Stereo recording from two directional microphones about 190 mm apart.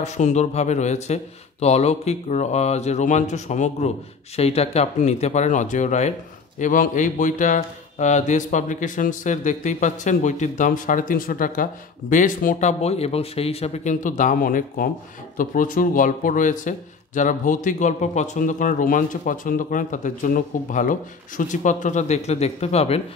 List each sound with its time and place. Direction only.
0.0 s a man's voice: 35° left (ahead or behind)